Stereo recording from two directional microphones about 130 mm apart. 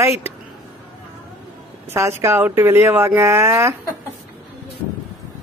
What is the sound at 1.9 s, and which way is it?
Speech, 20° right (ahead or behind).